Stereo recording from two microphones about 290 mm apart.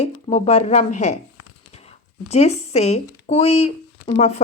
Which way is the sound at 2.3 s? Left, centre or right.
Left.